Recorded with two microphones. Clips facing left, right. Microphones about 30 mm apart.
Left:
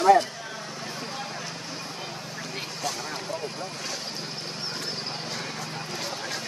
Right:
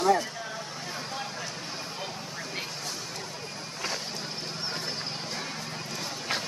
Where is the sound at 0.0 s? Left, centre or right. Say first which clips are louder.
Left 6 dB; left.